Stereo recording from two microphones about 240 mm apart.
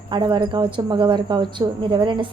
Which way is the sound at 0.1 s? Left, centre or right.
Centre.